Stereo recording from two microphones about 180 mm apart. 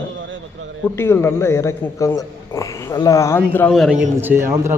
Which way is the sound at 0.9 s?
15° left (ahead or behind).